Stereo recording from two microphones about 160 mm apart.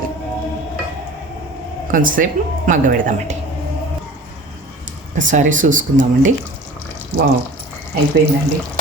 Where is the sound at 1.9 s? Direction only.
60° right (ahead or behind).